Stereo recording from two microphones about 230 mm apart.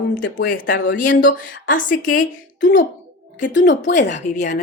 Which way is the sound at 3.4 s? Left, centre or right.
Left.